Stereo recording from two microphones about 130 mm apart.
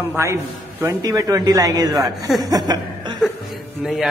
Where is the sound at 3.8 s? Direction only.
5° right (ahead or behind).